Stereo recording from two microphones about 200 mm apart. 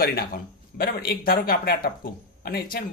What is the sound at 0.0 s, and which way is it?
Speech, 50° left (ahead or behind).